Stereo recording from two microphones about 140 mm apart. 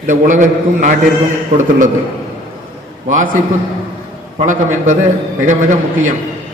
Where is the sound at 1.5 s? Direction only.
60° right (ahead or behind).